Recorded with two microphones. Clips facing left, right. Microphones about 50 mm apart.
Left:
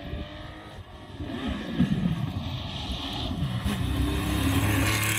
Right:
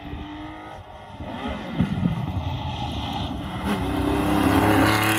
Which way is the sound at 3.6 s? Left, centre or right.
Right.